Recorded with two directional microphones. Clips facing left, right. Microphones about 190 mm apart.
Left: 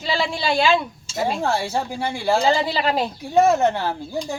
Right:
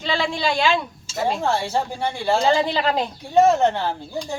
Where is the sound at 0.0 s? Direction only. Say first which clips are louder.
Even; 5° left (ahead or behind).